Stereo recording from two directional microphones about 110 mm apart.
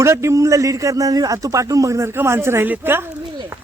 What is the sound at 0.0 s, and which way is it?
Speech, 25° right (ahead or behind).